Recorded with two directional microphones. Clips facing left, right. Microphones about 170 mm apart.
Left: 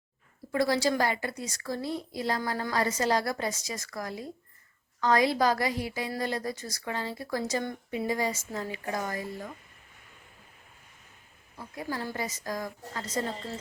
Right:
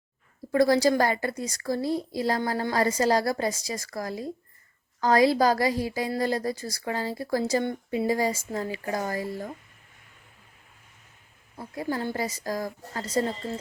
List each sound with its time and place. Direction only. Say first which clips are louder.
0.5 s a woman's voice: right 5 dB; 40° right (ahead or behind)
11.5 s a woman's voice: right 5 dB; 30° right (ahead or behind)